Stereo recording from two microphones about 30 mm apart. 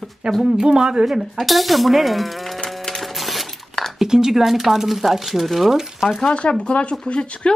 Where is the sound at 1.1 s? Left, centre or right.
Centre.